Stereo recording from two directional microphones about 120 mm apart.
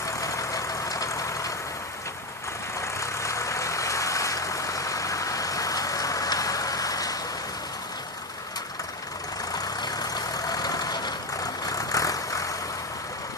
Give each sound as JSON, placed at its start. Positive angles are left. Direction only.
{"t": 0.0, "sound": "vehicle", "side_deg": 25}
{"t": 2.8, "sound": "vehicle", "side_deg": 25}
{"t": 9.5, "sound": "vehicle", "side_deg": 30}